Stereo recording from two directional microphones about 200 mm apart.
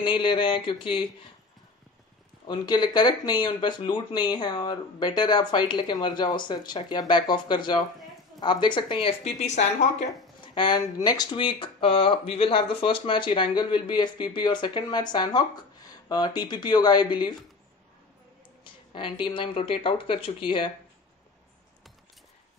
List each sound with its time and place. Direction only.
0.0 s speech: 25° left (ahead or behind)
2.4 s speech: 20° left (ahead or behind)
10.4 s a sound: 25° left (ahead or behind)
11.1 s speech: 20° left (ahead or behind)
18.6 s speech: 25° left (ahead or behind)